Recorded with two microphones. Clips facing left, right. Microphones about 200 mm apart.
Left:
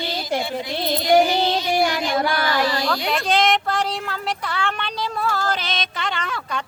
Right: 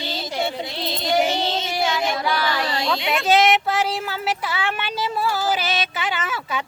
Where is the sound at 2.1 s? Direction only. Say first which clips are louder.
Left 2 dB; 50° left (ahead or behind).